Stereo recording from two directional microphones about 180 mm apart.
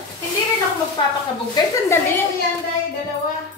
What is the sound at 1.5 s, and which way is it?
Speech, 15° left (ahead or behind).